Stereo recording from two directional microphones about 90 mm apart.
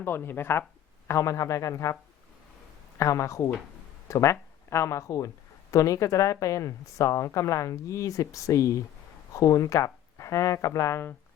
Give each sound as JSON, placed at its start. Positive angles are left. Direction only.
{"t": 0.0, "sound": "a woman's voice", "side_deg": 25}
{"t": 3.0, "sound": "a woman's voice", "side_deg": 35}